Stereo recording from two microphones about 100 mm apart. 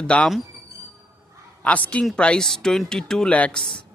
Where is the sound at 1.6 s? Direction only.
15° left (ahead or behind).